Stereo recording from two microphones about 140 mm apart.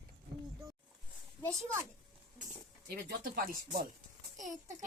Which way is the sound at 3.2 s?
90° right.